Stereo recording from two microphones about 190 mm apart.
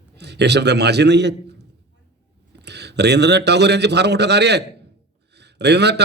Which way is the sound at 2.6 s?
60° right (ahead or behind).